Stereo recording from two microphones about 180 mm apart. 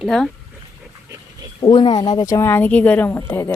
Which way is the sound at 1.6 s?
25° left (ahead or behind).